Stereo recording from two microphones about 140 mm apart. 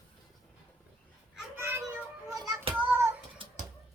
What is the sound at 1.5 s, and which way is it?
Children playing, 15° right (ahead or behind).